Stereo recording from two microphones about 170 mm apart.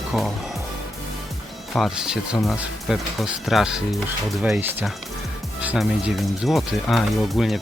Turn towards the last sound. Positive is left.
turn(degrees=0)  # may be behind; listen again after turning